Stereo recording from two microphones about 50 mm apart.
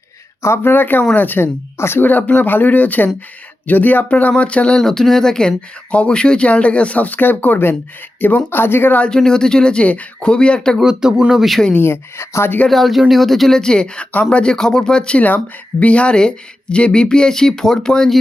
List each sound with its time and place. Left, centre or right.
0.6 s speech: left
1.8 s speech: left
2.0 s speech: left
4.8 s speech: centre; by 9.0 s left
9.0 s speech: centre
9.8 s speech: left
10.8 s speech: centre
11.8 s speech: left
12.6 s speech: centre